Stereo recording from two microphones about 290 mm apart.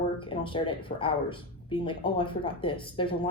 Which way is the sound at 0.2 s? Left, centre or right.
Centre.